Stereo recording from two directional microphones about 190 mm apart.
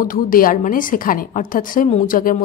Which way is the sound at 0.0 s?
45° left (ahead or behind).